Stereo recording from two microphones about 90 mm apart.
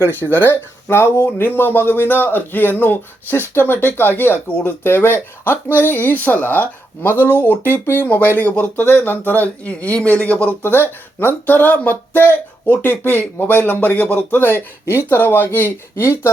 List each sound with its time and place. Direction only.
0.0 s speech: 20° left (ahead or behind)